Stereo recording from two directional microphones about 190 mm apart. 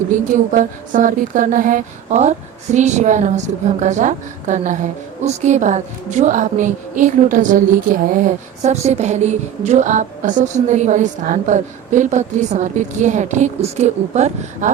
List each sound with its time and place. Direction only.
0.3 s a woman's voice: 45° right (ahead or behind)